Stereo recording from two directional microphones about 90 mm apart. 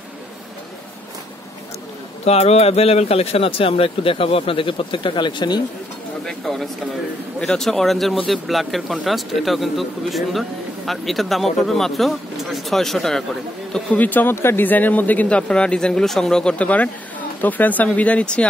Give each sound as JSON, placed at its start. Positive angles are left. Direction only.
{"t": 2.8, "sound": "speech", "side_deg": 90}
{"t": 6.2, "sound": "a man's voice", "side_deg": 5}